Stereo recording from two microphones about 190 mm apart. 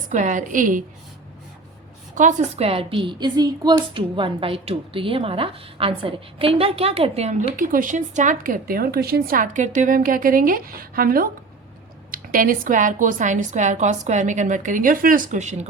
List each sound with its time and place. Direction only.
0.1 s a woman's voice: 40° right (ahead or behind)
2.1 s a woman's voice: 35° right (ahead or behind)